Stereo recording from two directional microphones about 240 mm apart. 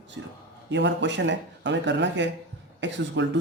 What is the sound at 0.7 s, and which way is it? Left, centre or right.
Speech, right.